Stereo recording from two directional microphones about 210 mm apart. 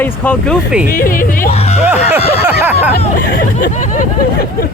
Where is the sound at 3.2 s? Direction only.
40° left (ahead or behind).